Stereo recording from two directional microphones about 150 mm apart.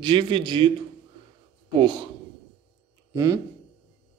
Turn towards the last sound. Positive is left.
turn(degrees=-20)  # may be behind; listen again after turning